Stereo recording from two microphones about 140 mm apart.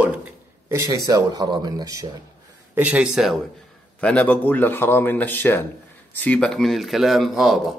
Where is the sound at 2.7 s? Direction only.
10° right (ahead or behind).